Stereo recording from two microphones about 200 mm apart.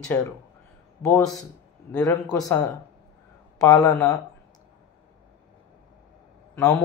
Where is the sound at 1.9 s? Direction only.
20° left (ahead or behind).